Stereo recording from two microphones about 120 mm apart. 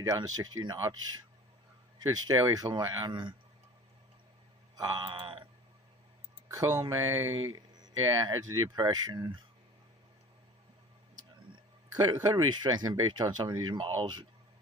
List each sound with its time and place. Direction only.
0.0 s speech: 30° right (ahead or behind)
2.0 s speech: 30° right (ahead or behind)
4.8 s speech: 30° right (ahead or behind)
5.0 s a sound: 45° right (ahead or behind)
6.6 s speech: 30° right (ahead or behind)
7.5 s speech: 35° right (ahead or behind)
12.0 s speech: 35° right (ahead or behind)